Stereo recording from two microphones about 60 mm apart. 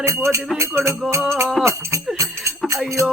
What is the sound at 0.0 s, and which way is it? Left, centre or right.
Speech, right.